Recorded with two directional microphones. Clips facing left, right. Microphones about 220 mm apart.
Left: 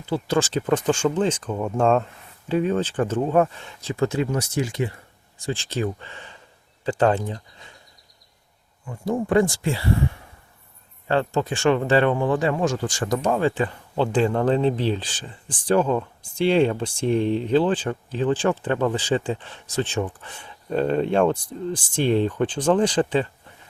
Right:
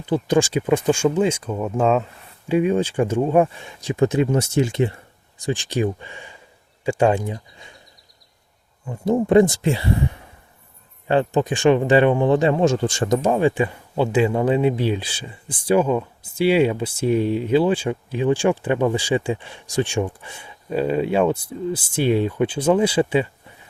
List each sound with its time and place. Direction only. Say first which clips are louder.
0.0 s speech: right 4 dB; 15° right (ahead or behind)
8.9 s speech: right 5 dB; 20° right (ahead or behind)